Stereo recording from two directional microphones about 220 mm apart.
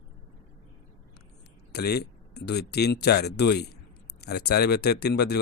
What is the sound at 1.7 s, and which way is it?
Speech, 45° left (ahead or behind).